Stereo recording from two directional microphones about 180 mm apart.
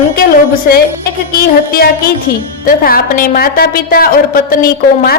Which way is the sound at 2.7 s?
55° left (ahead or behind).